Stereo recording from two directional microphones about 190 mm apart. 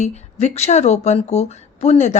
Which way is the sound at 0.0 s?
35° left (ahead or behind).